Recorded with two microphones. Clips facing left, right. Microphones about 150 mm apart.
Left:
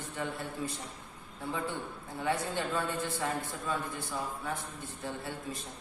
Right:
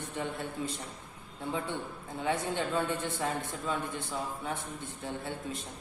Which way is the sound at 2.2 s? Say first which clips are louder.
Right 1 dB; 20° right (ahead or behind).